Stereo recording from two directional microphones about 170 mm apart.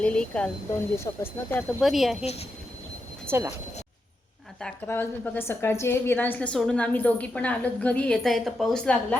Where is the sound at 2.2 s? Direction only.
35° left (ahead or behind).